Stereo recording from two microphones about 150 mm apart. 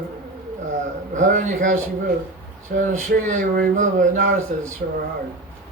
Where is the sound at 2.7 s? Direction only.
70° right (ahead or behind).